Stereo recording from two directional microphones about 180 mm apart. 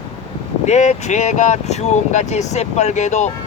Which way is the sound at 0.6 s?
40° left (ahead or behind).